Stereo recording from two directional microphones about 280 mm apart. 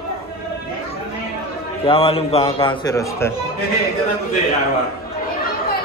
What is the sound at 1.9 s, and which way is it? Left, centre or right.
A man's voice, centre.